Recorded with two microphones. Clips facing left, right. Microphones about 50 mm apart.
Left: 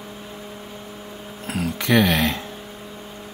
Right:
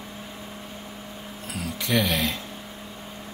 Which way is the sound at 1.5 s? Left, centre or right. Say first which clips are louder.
Left 6 dB; left.